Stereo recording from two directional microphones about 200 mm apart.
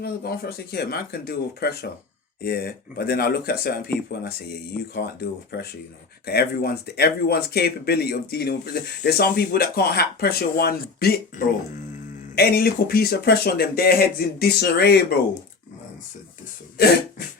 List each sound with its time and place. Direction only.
0.0 s speech: 50° left (ahead or behind)
4.9 s speech: 50° left (ahead or behind)
16.7 s cough: 50° left (ahead or behind)